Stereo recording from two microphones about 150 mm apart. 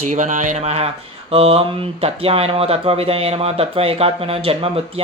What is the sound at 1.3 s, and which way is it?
Speech, 40° right (ahead or behind).